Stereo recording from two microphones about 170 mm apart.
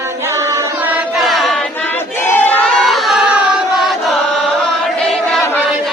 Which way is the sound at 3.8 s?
Centre (ahead or behind).